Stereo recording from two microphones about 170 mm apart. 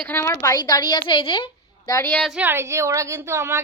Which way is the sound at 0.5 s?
25° left (ahead or behind).